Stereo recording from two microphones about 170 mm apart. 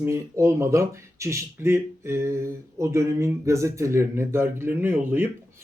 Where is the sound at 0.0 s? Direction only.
15° right (ahead or behind).